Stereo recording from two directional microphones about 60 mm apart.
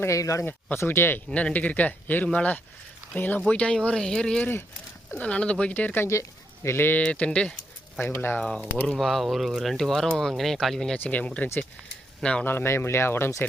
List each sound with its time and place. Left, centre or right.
0.0 s speech: left
0.8 s speech: left
1.3 s speech: left
3.5 s speech: centre
3.9 s speech: centre; by 6.1 s left
6.1 s speech: left
7.0 s speech: left
7.9 s speech: left
8.4 s speech: centre
8.9 s speech: centre
10.9 s speech: left
12.5 s speech: left